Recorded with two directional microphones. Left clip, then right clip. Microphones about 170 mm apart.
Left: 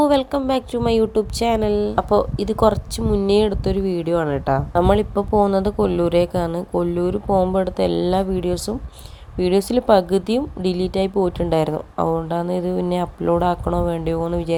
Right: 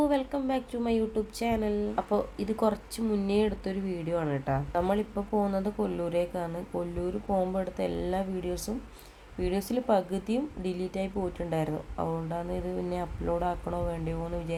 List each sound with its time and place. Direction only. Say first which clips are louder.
0.0 s a woman's voice: left 11 dB; 45° left (ahead or behind)